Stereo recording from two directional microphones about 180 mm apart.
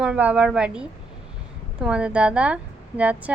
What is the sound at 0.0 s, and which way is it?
A woman's voice, 5° right (ahead or behind).